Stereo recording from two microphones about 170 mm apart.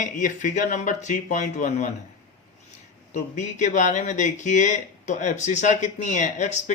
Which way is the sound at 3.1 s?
45° left (ahead or behind).